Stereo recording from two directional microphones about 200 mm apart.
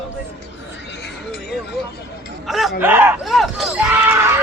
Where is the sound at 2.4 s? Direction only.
Centre (ahead or behind).